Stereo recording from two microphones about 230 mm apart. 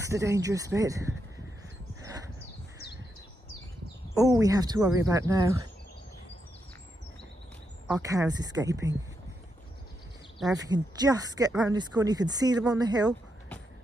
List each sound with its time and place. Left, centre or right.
0.0 s speech: centre
2.0 s a sound: centre
4.1 s speech: centre
7.9 s speech: centre
10.4 s speech: centre